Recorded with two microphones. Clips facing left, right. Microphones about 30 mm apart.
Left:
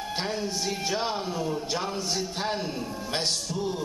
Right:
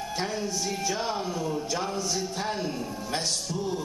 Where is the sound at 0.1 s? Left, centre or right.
Left.